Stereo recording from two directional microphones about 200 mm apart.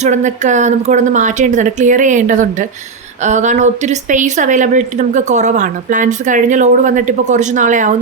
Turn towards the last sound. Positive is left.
turn(degrees=-40)  # may be behind; listen again after turning